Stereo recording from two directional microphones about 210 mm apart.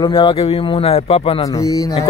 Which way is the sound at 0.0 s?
25° left (ahead or behind).